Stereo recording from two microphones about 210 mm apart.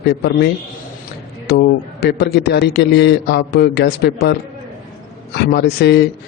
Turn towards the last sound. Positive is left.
turn(degrees=50)  # may be behind; listen again after turning